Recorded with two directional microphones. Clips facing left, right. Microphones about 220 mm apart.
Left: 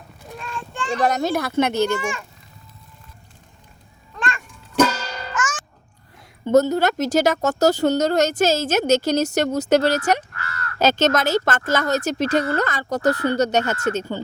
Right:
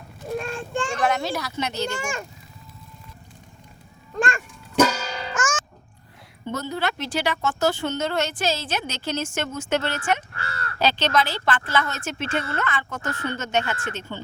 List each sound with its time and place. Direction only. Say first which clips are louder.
0.3 s child singing: right 5 dB; 50° right (ahead or behind)
0.9 s speech: left 6 dB; 40° left (ahead or behind)
4.2 s goat: right 3 dB; 45° right (ahead or behind)
4.8 s music: left 1 dB; 5° right (ahead or behind)
5.3 s music: even; 45° right (ahead or behind)
6.4 s speech: left 11 dB; 45° left (ahead or behind)
10.3 s caw: even; 30° right (ahead or behind)
10.8 s speech: left 4 dB; 45° left (ahead or behind)